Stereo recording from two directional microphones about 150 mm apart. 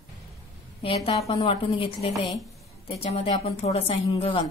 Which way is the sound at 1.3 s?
35° left (ahead or behind).